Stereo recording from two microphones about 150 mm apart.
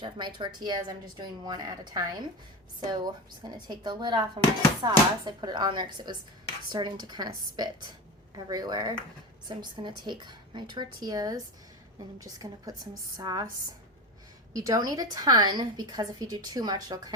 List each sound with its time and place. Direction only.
0.0 s a woman's voice: 30° right (ahead or behind)
14.5 s a woman's voice: 25° right (ahead or behind)